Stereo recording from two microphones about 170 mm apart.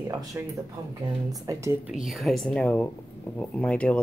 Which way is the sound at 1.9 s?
Centre (ahead or behind).